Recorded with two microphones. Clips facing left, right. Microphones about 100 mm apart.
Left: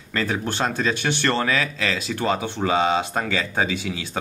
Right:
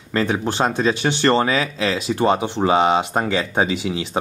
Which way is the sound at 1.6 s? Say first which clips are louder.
Right 4 dB; 20° right (ahead or behind).